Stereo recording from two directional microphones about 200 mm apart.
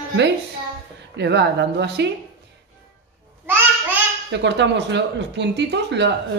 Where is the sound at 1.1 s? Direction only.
60° right (ahead or behind).